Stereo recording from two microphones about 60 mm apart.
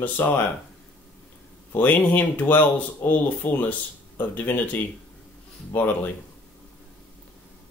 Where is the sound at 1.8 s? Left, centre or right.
Left.